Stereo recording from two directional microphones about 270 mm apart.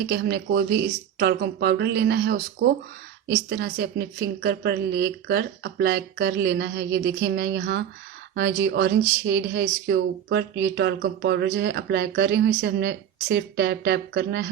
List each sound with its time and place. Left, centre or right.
0.0 s speech: right